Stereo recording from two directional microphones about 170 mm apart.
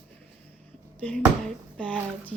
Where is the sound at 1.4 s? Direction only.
10° left (ahead or behind).